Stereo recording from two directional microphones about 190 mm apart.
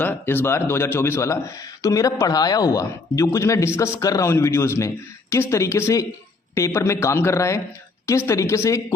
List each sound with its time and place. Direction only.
0.0 s speech: 10° left (ahead or behind)